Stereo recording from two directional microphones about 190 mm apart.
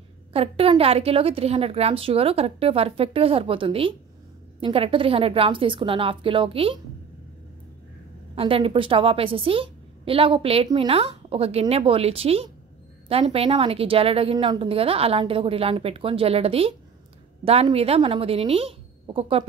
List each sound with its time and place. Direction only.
0.3 s a woman's voice: 30° right (ahead or behind)
8.4 s a woman's voice: 30° right (ahead or behind)